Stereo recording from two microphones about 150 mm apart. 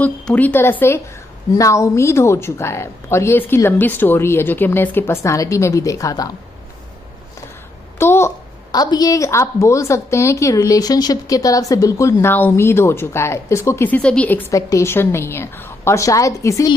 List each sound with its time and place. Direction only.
0.0 s speech: 10° left (ahead or behind)
8.0 s a sound: 15° left (ahead or behind)
8.7 s a woman's voice: 25° left (ahead or behind)